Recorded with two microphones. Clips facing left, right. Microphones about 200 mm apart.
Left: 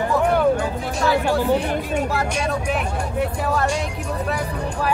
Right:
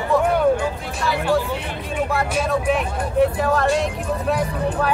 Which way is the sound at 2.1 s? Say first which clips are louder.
Right 2 dB; centre (ahead or behind).